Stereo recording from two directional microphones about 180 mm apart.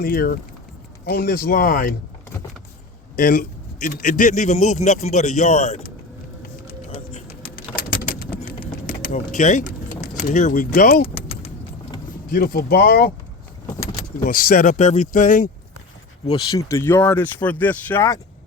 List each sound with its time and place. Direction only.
0.0 s speech: 55° left (ahead or behind)
3.2 s a man's voice: 50° left (ahead or behind)
7.3 s a sound: 55° left (ahead or behind)
10.2 s speech: 45° left (ahead or behind)
11.0 s vehicle: 30° left (ahead or behind)
12.3 s speech: 55° left (ahead or behind)
14.2 s speech: 50° left (ahead or behind)
16.5 s speech: 15° left (ahead or behind)